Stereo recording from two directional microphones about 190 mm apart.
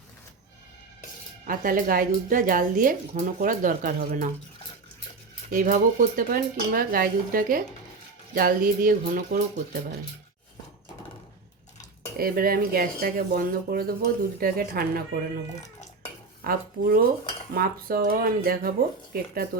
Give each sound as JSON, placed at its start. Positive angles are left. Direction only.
{"t": 1.5, "sound": "speech", "side_deg": -45}
{"t": 5.5, "sound": "speech", "side_deg": -45}
{"t": 12.1, "sound": "speech", "side_deg": -50}
{"t": 16.4, "sound": "speech", "side_deg": -50}